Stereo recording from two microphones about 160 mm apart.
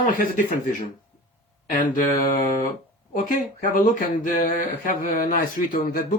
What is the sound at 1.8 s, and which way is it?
Speech, 60° left (ahead or behind).